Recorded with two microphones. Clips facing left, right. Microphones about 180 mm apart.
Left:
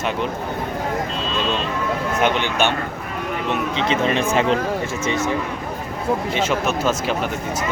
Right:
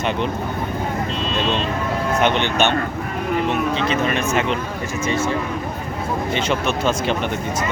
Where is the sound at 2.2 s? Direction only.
10° left (ahead or behind).